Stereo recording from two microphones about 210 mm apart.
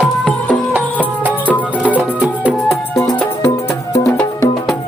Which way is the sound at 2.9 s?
15° left (ahead or behind).